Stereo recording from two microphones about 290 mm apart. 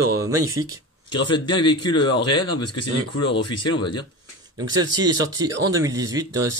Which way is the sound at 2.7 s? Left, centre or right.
Left.